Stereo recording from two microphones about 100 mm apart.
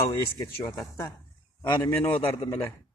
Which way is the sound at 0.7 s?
30° left (ahead or behind).